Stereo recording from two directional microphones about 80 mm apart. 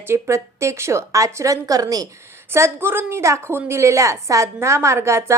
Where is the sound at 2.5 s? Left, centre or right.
Right.